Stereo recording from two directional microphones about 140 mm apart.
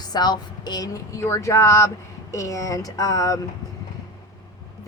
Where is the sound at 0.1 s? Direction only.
30° left (ahead or behind).